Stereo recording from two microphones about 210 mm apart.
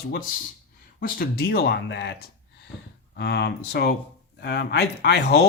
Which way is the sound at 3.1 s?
50° left (ahead or behind).